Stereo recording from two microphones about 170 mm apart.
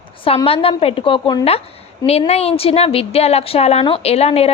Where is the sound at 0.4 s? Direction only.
35° left (ahead or behind).